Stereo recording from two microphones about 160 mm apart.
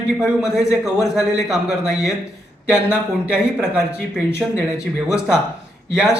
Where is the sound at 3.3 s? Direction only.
5° right (ahead or behind).